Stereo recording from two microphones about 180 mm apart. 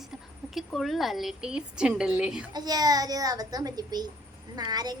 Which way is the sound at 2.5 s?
20° right (ahead or behind).